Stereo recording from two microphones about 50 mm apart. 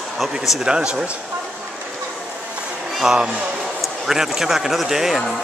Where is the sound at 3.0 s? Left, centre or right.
Centre.